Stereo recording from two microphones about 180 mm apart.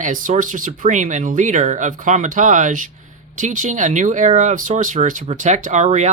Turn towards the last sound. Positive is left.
turn(degrees=-40)  # may be behind; listen again after turning